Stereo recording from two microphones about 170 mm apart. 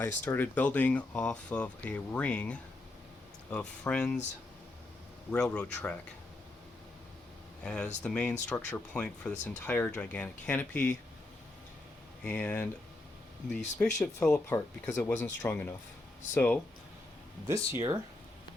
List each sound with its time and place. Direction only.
0.0 s speech: 10° left (ahead or behind)
5.3 s speech: 5° left (ahead or behind)
7.6 s speech: 5° left (ahead or behind)
12.2 s speech: 5° left (ahead or behind)
17.5 s speech: 20° right (ahead or behind)